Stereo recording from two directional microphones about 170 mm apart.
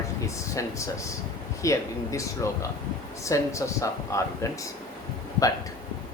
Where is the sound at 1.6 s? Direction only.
20° left (ahead or behind).